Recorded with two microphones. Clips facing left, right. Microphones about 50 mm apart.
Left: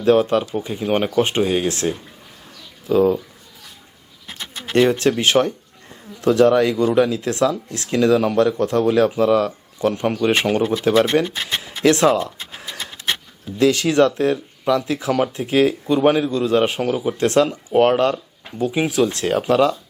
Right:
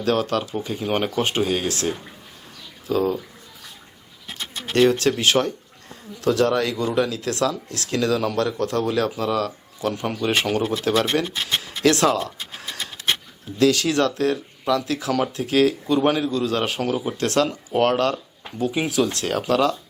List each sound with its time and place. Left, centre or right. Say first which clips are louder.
0.0 s speech: left 6 dB; left
0.9 s speech: left 5 dB; centre; by 3.2 s left
4.7 s speech: left 2 dB; left
13.6 s speech: left 3 dB; left
16.8 s speech: left 3 dB; centre
17.2 s speech: left 6 dB; left
18.9 s speech: left 3 dB; left